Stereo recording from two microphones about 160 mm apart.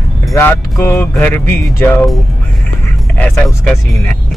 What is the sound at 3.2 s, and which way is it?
Speech, 10° left (ahead or behind).